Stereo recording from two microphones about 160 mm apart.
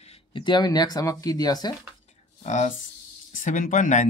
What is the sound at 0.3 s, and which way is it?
Speech, 30° left (ahead or behind).